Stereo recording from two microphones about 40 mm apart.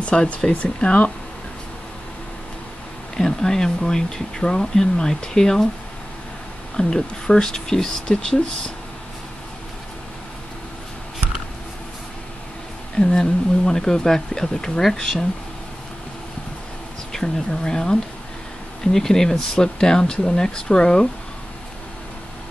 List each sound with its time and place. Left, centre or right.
0.0 s speech: left
3.2 s speech: centre
6.8 s speech: centre
13.0 s speech: centre
17.1 s speech: centre